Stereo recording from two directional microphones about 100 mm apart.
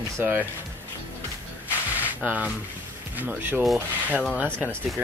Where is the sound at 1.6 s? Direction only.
15° right (ahead or behind).